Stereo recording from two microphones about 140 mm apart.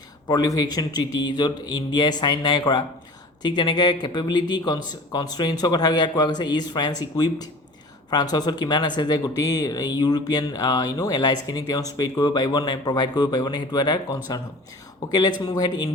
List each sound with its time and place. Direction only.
0.3 s speech: 25° left (ahead or behind)
15.4 s speech: 30° left (ahead or behind)